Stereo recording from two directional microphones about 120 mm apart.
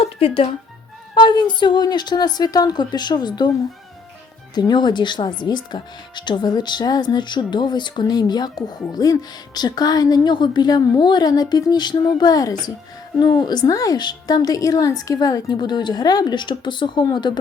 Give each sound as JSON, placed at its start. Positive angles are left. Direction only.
{"t": 0.0, "sound": "music", "side_deg": 50}
{"t": 1.1, "sound": "a woman's voice", "side_deg": 40}
{"t": 4.5, "sound": "a woman's voice", "side_deg": 35}